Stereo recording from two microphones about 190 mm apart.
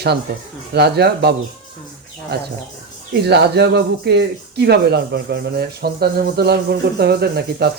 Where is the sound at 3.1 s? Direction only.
60° right (ahead or behind).